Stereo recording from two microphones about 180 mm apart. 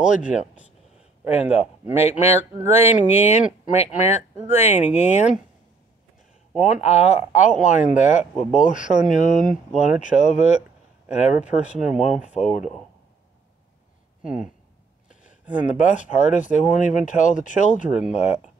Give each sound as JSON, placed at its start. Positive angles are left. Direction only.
{"t": 0.0, "sound": "speech", "side_deg": 45}
{"t": 1.3, "sound": "speech", "side_deg": 35}
{"t": 6.6, "sound": "speech", "side_deg": 40}
{"t": 14.2, "sound": "speech", "side_deg": -5}
{"t": 15.5, "sound": "speech", "side_deg": 45}